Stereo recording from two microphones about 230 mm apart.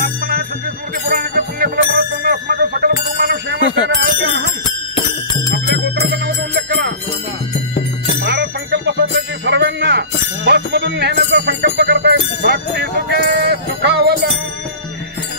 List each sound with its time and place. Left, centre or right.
0.0 s music: right
3.6 s bicycle bell: centre
6.1 s music: right
8.2 s music: right
11.3 s bell: right
13.7 s music: right